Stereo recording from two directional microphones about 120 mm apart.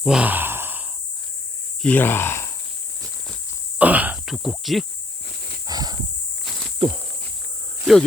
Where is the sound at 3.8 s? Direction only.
15° right (ahead or behind).